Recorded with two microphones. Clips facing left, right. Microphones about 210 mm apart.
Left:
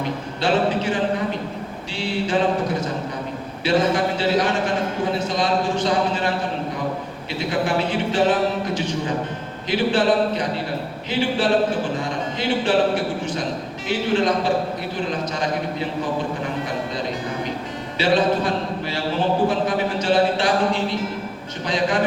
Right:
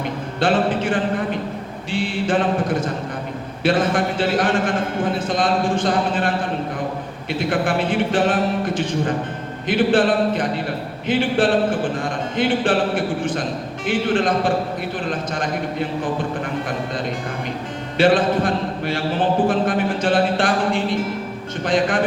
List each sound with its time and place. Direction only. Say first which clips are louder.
0.3 s a man's voice: right 1 dB; 55° right (ahead or behind)
1.9 s a sound: right 2 dB; 50° right (ahead or behind)
3.6 s a man's voice: right 1 dB; 55° right (ahead or behind)
7.3 s a man's voice: right 1 dB; 55° right (ahead or behind)
17.9 s a sound: right 3 dB; 55° right (ahead or behind)
19.5 s a man's voice: right 2 dB; 55° right (ahead or behind)